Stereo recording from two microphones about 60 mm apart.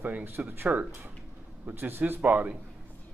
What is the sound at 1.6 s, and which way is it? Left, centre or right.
Speech, right.